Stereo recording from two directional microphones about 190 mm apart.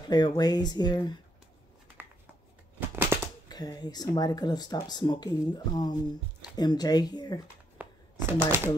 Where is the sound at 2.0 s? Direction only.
10° right (ahead or behind).